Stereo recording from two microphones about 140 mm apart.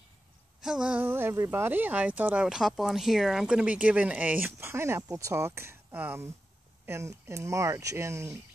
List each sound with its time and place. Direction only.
0.6 s speech: 5° right (ahead or behind); by 8.4 s 20° right (ahead or behind)